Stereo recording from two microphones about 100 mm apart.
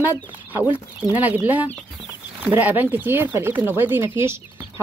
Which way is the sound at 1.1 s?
20° right (ahead or behind).